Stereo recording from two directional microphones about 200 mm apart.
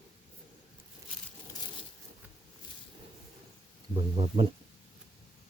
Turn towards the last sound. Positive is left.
turn(degrees=-25)  # may be behind; listen again after turning